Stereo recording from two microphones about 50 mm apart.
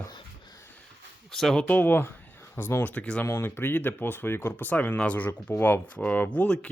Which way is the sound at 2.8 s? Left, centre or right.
Left.